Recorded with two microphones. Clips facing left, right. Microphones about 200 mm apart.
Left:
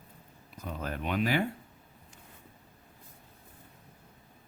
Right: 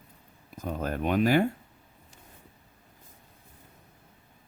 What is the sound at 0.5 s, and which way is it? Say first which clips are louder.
Speech: right 6 dB; 45° right (ahead or behind).